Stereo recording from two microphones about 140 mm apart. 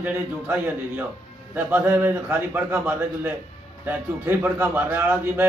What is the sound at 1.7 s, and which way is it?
A man's voice, 15° right (ahead or behind).